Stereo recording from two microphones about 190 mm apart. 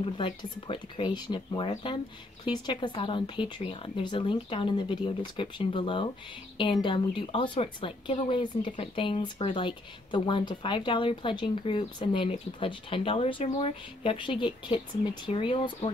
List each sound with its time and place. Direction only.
0.0 s speech: 30° left (ahead or behind)